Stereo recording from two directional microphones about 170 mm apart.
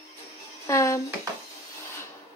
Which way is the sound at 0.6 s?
20° left (ahead or behind).